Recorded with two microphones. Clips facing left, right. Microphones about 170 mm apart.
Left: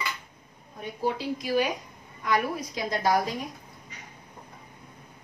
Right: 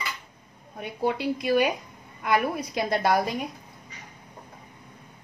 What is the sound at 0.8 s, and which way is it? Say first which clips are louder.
A woman's voice: right 3 dB; 65° right (ahead or behind).